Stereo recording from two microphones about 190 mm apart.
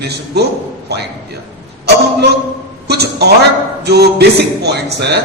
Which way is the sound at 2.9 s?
60° right (ahead or behind).